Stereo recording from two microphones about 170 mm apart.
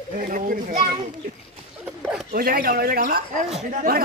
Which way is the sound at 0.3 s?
55° right (ahead or behind).